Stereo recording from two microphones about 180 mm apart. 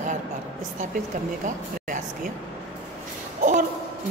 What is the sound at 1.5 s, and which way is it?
Speech, 45° right (ahead or behind).